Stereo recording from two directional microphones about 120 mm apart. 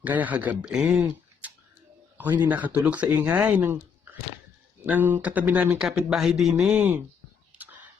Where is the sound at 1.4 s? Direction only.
15° right (ahead or behind).